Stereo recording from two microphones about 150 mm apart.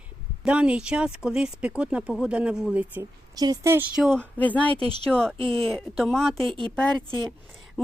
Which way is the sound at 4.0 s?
5° left (ahead or behind).